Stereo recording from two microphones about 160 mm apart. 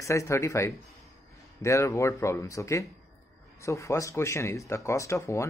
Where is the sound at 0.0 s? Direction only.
20° left (ahead or behind).